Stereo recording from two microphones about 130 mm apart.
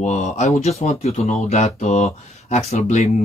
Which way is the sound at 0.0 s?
70° left (ahead or behind).